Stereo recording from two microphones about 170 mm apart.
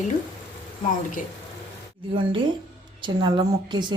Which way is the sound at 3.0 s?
25° right (ahead or behind).